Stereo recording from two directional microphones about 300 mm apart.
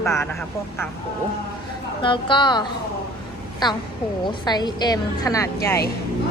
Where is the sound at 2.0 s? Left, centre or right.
Centre.